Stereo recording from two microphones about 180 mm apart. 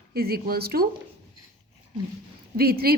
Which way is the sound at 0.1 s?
60° right (ahead or behind).